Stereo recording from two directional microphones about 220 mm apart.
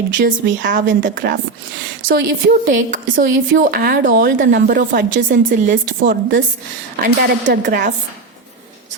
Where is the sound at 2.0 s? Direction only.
55° right (ahead or behind).